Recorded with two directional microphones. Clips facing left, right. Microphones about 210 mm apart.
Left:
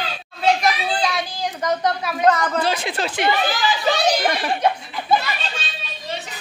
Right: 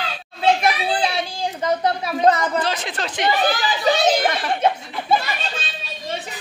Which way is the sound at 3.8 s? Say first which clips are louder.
Right 3 dB; 20° right (ahead or behind).